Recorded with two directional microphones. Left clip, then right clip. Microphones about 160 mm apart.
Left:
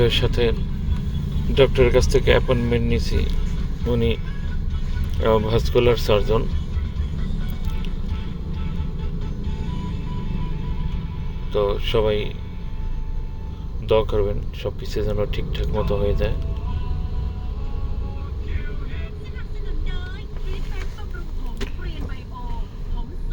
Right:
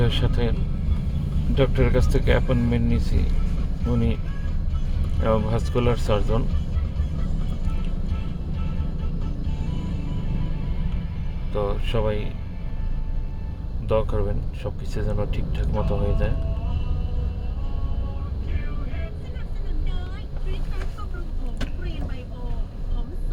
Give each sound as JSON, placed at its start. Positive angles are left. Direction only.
{"t": 0.0, "sound": "speech", "side_deg": 5}
{"t": 1.5, "sound": "speech", "side_deg": 10}
{"t": 5.2, "sound": "speech", "side_deg": 5}
{"t": 11.5, "sound": "speech", "side_deg": 0}
{"t": 13.8, "sound": "speech", "side_deg": 0}